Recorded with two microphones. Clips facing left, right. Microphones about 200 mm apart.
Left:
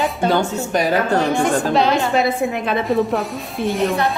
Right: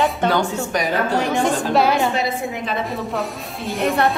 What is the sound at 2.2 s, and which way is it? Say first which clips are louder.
Speech: left 5 dB; 60° left (ahead or behind).